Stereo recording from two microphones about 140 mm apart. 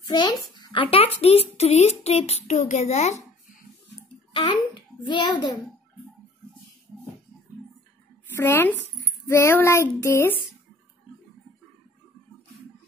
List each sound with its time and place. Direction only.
0.0 s a child's voice: 30° left (ahead or behind); by 3.2 s 55° left (ahead or behind)
4.3 s a child's voice: 35° left (ahead or behind)
8.4 s speech: 15° left (ahead or behind)
9.2 s child singing: 20° left (ahead or behind)